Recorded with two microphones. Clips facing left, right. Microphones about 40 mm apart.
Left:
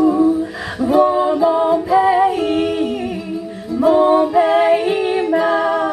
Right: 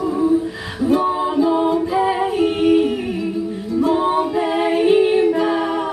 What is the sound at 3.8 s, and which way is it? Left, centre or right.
Music, centre.